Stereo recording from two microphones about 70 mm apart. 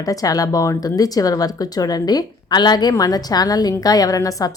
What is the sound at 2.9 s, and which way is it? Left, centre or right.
A woman's voice, left.